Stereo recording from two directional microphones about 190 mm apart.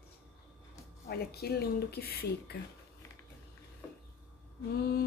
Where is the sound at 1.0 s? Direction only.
55° left (ahead or behind).